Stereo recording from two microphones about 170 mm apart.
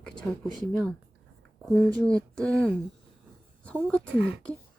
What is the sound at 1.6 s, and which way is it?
Speech, 5° left (ahead or behind).